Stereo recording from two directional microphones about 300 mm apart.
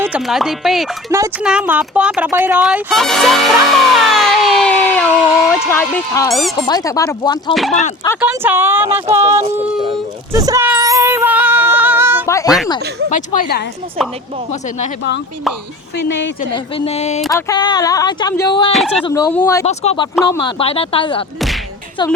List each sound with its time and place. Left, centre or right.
0.0 s speech: centre; by 7.9 s left
8.2 s speech: centre
9.4 s a sound: centre
13.1 s speech: left
16.0 s a woman's voice: left
16.7 s speech: centre
17.2 s speech: centre
19.6 s speech: left